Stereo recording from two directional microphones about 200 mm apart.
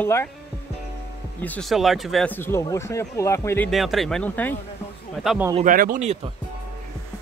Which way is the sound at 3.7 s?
Centre (ahead or behind).